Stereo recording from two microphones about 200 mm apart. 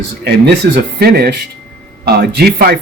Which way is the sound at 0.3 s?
55° right (ahead or behind).